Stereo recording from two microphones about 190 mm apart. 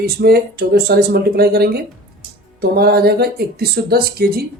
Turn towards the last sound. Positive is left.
turn(degrees=-50)  # may be behind; listen again after turning